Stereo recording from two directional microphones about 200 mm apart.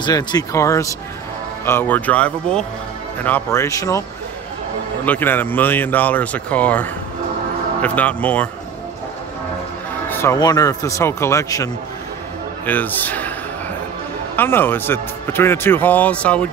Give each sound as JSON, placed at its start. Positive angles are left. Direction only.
{"t": 0.0, "sound": "speech", "side_deg": 20}
{"t": 5.0, "sound": "speech", "side_deg": 10}
{"t": 10.0, "sound": "speech", "side_deg": 10}
{"t": 14.3, "sound": "speech", "side_deg": 10}